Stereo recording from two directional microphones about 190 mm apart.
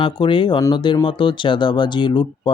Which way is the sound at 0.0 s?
25° left (ahead or behind).